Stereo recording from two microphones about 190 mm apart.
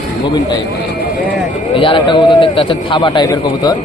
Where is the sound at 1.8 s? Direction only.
25° left (ahead or behind).